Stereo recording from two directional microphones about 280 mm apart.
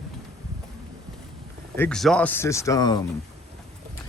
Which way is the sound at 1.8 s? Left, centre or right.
Centre.